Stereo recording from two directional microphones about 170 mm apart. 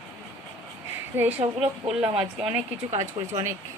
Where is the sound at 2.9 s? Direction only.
40° right (ahead or behind).